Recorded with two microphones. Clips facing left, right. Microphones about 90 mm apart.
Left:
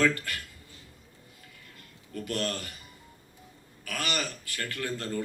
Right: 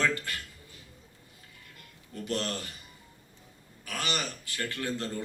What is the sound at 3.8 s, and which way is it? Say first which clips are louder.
A man's voice: left 1 dB; 20° right (ahead or behind).